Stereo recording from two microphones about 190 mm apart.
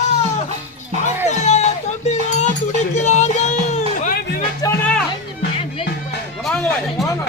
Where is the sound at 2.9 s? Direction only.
35° left (ahead or behind).